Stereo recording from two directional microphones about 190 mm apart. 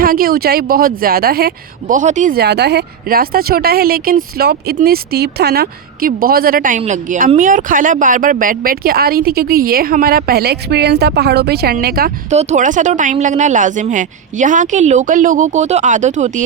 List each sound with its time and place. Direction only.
0.0 s speech: 50° right (ahead or behind)
12.3 s speech: 35° right (ahead or behind)